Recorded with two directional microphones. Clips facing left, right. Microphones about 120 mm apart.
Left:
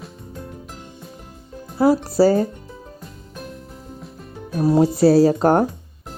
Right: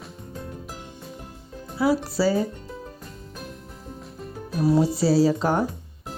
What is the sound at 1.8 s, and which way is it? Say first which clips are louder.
Speech: left 6 dB; 45° left (ahead or behind).